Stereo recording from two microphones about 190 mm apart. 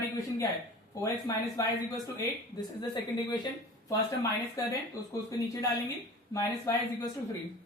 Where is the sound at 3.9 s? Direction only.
15° left (ahead or behind).